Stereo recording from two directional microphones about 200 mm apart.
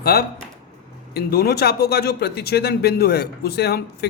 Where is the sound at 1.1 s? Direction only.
50° left (ahead or behind).